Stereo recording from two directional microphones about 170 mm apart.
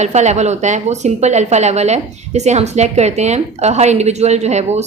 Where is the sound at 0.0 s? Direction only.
40° right (ahead or behind).